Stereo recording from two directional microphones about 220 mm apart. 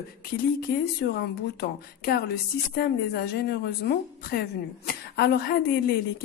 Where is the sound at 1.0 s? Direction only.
50° left (ahead or behind).